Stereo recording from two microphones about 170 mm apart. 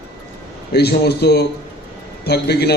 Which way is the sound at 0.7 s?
70° left (ahead or behind).